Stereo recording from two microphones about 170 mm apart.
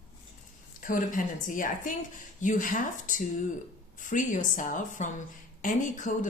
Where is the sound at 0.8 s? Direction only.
50° left (ahead or behind).